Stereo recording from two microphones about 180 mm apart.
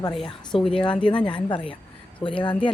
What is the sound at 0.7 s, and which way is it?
Speech, 25° left (ahead or behind).